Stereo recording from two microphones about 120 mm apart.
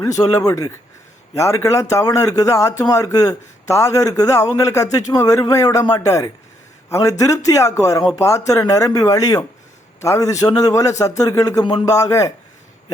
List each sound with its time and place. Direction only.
0.0 s a man's voice: 30° left (ahead or behind)